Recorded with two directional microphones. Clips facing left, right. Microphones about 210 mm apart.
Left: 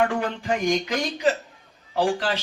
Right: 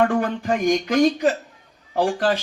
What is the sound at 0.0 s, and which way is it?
A man's voice, 45° right (ahead or behind).